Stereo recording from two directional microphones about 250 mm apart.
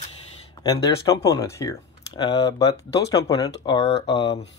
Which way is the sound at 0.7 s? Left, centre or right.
Centre.